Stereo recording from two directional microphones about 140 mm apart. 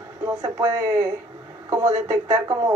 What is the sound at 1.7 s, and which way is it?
Speech, 20° right (ahead or behind).